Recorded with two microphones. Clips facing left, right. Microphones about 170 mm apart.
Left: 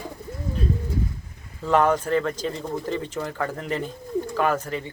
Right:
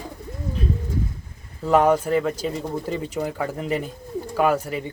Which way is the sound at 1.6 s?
10° right (ahead or behind).